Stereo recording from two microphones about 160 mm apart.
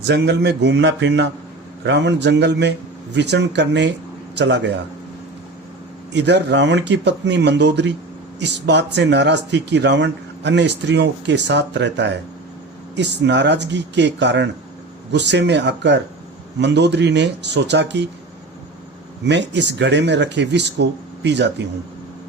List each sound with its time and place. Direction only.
0.1 s speech: 90° right
6.1 s speech: 90° right
19.2 s speech: 90° right